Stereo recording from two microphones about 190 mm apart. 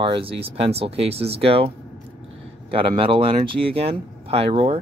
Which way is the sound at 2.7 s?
30° right (ahead or behind).